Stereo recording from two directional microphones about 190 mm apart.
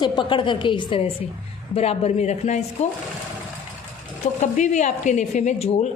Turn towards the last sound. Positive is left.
turn(degrees=35)  # may be behind; listen again after turning